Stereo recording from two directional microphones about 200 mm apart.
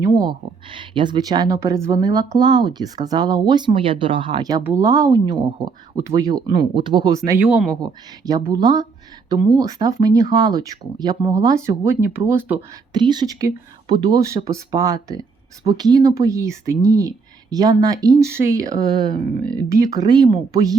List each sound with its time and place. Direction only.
0.0 s speech: 20° right (ahead or behind)
7.3 s speech: 10° right (ahead or behind)
7.8 s speech: 20° right (ahead or behind)
12.9 s speech: 20° right (ahead or behind)
19.4 s speech: 5° left (ahead or behind)
19.8 s speech: 20° right (ahead or behind)